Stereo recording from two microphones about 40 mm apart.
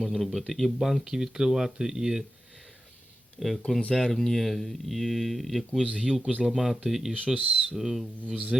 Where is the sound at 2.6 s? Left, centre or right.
Centre.